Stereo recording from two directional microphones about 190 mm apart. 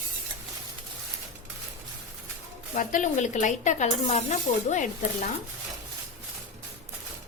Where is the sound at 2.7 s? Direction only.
40° left (ahead or behind).